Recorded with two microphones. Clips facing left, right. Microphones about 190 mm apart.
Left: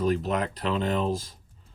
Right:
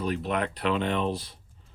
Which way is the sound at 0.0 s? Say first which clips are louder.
Left 3 dB; 40° left (ahead or behind).